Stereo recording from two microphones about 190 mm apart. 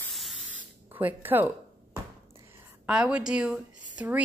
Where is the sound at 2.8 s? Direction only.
5° right (ahead or behind).